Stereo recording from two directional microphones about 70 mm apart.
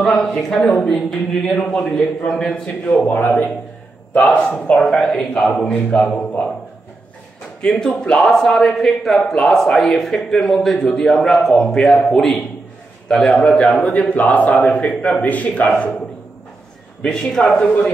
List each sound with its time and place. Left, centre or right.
0.0 s a man's voice: centre; by 6.5 s left
7.6 s a man's voice: centre
17.0 s a man's voice: centre
17.5 s a man's voice: centre